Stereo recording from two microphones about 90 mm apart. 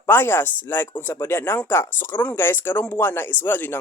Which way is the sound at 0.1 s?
25° left (ahead or behind).